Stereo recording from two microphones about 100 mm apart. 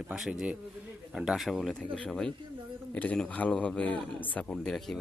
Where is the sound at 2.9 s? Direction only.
15° left (ahead or behind).